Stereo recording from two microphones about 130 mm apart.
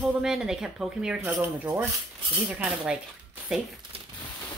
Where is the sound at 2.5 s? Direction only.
5° right (ahead or behind).